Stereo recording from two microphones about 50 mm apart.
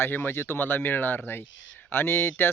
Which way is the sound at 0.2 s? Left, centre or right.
Left.